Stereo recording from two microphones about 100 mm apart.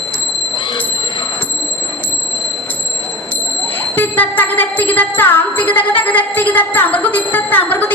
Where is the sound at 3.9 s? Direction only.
20° left (ahead or behind).